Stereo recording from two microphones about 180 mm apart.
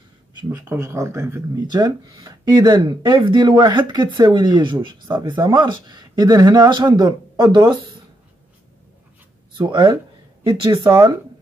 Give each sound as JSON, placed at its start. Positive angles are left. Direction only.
{"t": 0.5, "sound": "speech", "side_deg": -15}
{"t": 9.6, "sound": "speech", "side_deg": -25}